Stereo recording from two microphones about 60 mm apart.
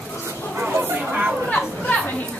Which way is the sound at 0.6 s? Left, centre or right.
Right.